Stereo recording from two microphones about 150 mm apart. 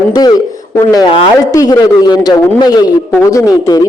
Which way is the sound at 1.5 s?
25° left (ahead or behind).